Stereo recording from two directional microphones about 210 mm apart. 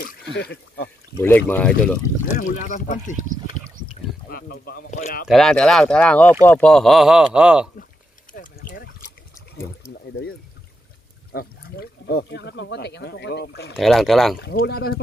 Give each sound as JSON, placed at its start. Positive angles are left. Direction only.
{"t": 0.0, "sound": "speech", "side_deg": 45}
{"t": 1.1, "sound": "speech", "side_deg": 10}
{"t": 2.3, "sound": "speech", "side_deg": 35}
{"t": 4.3, "sound": "speech", "side_deg": 45}
{"t": 5.3, "sound": "speech", "side_deg": 5}
{"t": 8.3, "sound": "a sound", "side_deg": 40}
{"t": 11.3, "sound": "speech", "side_deg": 45}
{"t": 13.7, "sound": "speech", "side_deg": 0}
{"t": 14.4, "sound": "speech", "side_deg": 45}